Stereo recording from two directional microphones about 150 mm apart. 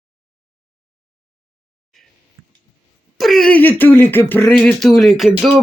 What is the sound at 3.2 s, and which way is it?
Speech, centre (ahead or behind).